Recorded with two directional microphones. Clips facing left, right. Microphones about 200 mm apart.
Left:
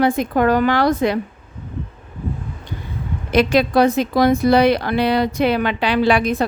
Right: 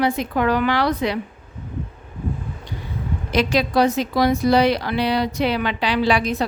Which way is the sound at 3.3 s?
55° left (ahead or behind).